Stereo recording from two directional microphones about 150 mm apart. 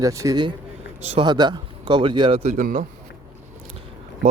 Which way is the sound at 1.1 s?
30° right (ahead or behind).